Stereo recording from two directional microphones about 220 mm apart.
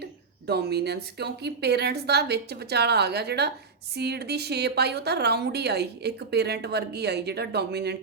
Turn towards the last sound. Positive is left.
turn(degrees=-50)  # may be behind; listen again after turning